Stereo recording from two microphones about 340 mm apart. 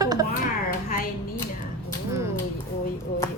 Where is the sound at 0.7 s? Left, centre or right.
Left.